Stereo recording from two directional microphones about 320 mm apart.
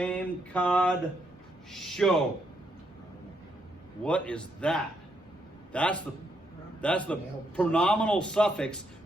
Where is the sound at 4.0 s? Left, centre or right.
Centre.